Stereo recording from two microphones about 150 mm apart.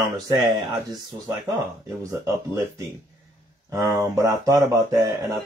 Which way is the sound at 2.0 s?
20° right (ahead or behind).